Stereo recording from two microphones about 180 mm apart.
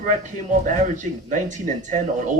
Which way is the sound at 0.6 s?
45° right (ahead or behind).